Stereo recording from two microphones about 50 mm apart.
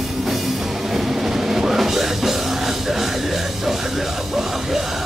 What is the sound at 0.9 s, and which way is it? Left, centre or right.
Music, centre.